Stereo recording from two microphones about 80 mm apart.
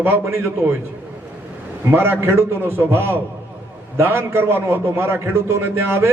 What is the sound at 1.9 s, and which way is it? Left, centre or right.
A man's voice, right.